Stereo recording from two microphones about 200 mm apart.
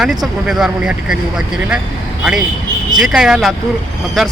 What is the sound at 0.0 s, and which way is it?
Speech, centre (ahead or behind).